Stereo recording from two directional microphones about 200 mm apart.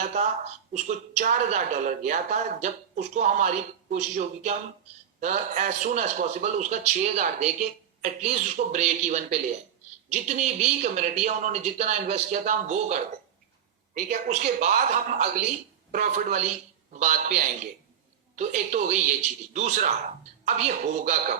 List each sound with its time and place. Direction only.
0.1 s a woman's voice: 35° right (ahead or behind)